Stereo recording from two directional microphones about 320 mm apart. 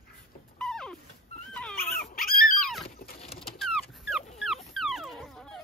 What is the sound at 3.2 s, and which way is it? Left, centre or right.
Dog, centre.